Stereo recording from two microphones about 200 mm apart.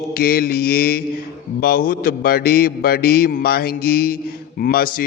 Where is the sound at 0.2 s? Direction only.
50° left (ahead or behind).